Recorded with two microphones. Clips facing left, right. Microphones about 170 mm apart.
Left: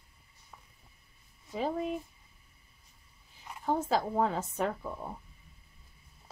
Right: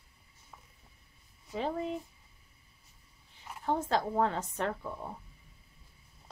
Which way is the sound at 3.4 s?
5° left (ahead or behind).